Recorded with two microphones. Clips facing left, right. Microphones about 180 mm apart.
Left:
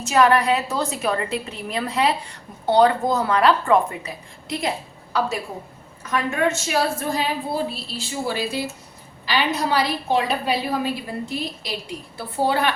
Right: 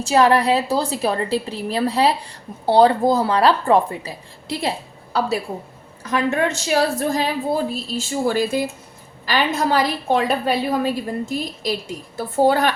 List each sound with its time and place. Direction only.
0.0 s a woman's voice: 30° right (ahead or behind)
6.1 s a woman's voice: 35° right (ahead or behind)